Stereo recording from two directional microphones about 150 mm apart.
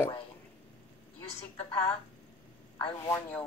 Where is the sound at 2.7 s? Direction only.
35° left (ahead or behind).